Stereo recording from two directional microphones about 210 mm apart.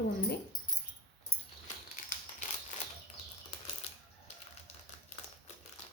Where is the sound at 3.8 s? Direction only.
30° left (ahead or behind).